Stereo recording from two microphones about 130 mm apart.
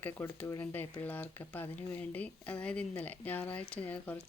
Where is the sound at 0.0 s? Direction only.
15° left (ahead or behind).